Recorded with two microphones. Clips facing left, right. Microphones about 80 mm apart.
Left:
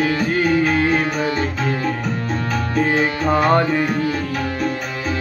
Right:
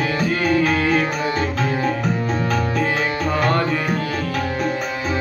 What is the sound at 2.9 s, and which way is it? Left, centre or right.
Music, left.